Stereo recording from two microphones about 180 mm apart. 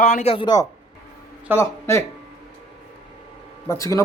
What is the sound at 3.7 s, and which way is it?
Speech, 15° left (ahead or behind).